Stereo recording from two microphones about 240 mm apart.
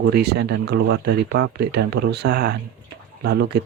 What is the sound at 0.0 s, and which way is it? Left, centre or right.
Speech, right.